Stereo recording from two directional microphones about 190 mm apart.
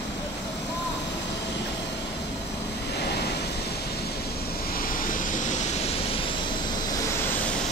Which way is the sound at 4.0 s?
55° left (ahead or behind).